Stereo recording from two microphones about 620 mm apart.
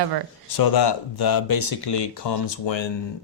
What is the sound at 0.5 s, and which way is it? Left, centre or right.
Speech, left.